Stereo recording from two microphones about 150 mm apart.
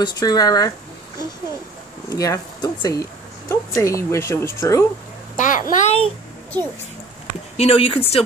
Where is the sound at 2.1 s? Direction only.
25° left (ahead or behind).